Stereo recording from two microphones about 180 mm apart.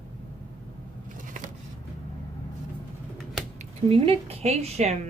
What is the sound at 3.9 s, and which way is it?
A woman's voice, 30° right (ahead or behind).